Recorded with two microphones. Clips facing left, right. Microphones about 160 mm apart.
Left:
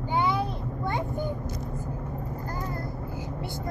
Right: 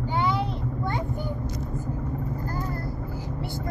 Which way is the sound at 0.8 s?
20° left (ahead or behind).